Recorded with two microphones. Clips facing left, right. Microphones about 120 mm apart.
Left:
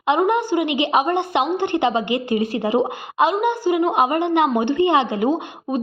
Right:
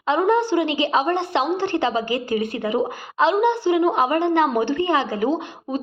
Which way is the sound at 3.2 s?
15° left (ahead or behind).